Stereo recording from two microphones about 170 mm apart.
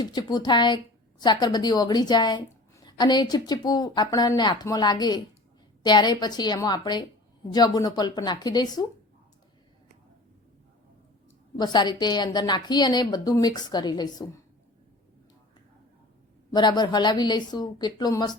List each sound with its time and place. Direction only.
0.0 s a woman's voice: 25° left (ahead or behind)
11.5 s a woman's voice: 25° left (ahead or behind)
16.5 s a woman's voice: 25° left (ahead or behind)